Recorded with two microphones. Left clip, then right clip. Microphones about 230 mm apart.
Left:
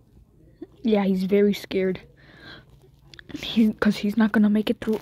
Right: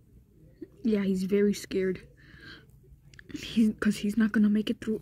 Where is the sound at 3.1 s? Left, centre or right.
Centre.